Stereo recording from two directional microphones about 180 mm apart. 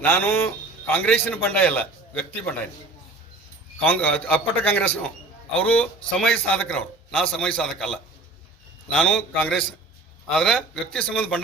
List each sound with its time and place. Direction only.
0.0 s a man's voice: 10° left (ahead or behind)
3.8 s a man's voice: 5° left (ahead or behind)